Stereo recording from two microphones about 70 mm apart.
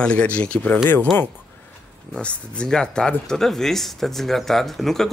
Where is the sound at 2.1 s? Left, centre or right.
Centre.